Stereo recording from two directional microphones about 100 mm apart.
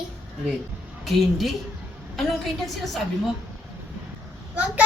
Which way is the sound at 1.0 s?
Centre (ahead or behind).